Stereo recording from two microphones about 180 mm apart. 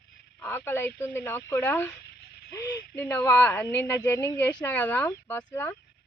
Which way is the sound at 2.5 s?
20° left (ahead or behind).